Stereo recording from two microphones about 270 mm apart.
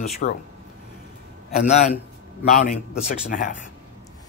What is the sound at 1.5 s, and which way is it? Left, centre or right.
Speech, left.